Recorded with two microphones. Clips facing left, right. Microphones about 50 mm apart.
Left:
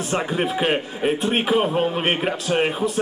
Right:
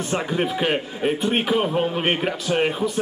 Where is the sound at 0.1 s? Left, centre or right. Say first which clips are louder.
Left 1 dB; centre.